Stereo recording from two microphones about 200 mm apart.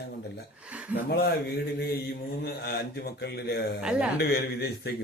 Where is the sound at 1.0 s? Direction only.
50° left (ahead or behind).